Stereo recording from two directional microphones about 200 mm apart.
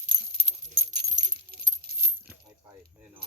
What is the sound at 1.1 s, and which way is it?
Keys jangling, 40° right (ahead or behind).